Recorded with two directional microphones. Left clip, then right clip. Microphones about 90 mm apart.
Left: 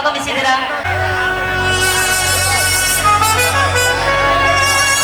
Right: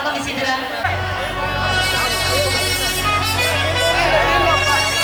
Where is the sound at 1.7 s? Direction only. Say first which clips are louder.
Left 3 dB; 35° left (ahead or behind).